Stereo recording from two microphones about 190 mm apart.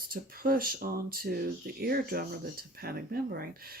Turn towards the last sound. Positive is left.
turn(degrees=-50)  # may be behind; listen again after turning